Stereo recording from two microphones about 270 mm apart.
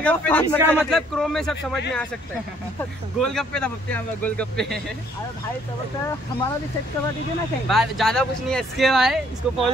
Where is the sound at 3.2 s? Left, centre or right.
Centre.